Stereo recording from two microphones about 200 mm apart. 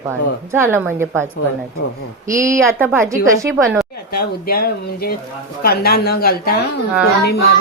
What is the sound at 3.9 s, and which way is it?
Speech, 50° left (ahead or behind).